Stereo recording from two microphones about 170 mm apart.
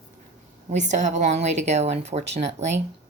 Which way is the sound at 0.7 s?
45° right (ahead or behind).